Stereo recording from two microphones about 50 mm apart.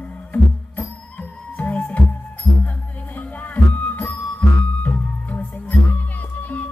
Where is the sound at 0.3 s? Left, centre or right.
Left.